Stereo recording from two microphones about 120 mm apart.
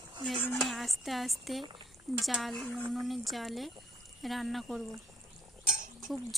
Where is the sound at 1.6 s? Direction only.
45° right (ahead or behind).